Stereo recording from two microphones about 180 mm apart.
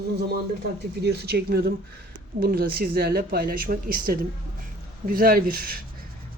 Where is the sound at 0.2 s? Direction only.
65° right (ahead or behind).